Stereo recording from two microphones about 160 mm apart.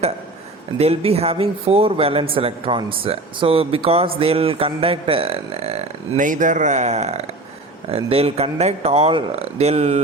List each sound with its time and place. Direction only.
0.8 s a man's voice: 40° right (ahead or behind)